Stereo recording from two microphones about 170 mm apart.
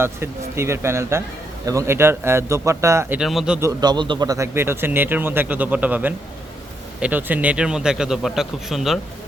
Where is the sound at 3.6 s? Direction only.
20° right (ahead or behind).